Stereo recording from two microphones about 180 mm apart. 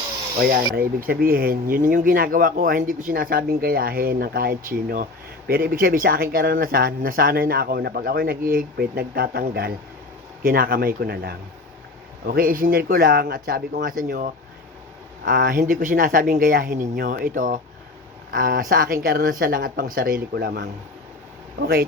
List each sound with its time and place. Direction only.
0.5 s speech: 55° right (ahead or behind)
15.2 s speech: 65° right (ahead or behind)